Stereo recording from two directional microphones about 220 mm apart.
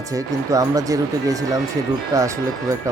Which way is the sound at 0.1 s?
15° right (ahead or behind).